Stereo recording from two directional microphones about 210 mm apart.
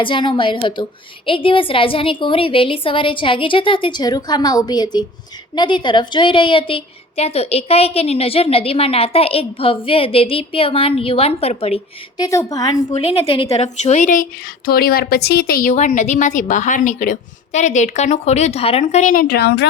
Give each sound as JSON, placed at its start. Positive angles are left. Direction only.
{"t": 0.0, "sound": "a woman's voice", "side_deg": 25}
{"t": 12.9, "sound": "a woman's voice", "side_deg": 30}